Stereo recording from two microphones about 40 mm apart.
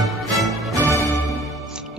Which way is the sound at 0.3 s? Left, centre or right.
Centre.